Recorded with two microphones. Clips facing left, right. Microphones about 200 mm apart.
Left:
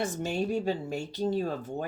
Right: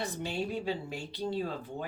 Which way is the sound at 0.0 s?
45° left (ahead or behind).